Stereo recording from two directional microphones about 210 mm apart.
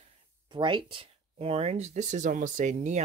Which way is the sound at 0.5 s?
25° right (ahead or behind).